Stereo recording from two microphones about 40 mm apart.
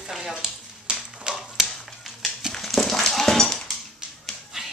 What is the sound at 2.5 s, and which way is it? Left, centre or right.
Dog, centre.